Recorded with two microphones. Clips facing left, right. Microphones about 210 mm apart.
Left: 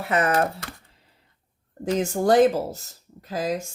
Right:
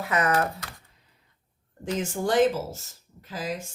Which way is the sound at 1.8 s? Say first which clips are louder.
Left 5 dB; 40° left (ahead or behind).